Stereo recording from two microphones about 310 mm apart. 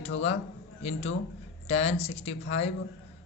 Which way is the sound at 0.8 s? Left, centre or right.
Left.